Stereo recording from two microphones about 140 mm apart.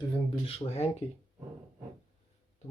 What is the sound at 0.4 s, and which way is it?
Speech, 45° left (ahead or behind).